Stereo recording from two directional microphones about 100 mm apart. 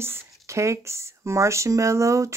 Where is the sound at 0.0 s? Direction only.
25° right (ahead or behind).